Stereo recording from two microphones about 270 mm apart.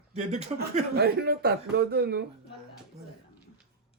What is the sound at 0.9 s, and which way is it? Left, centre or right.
A man's voice, right.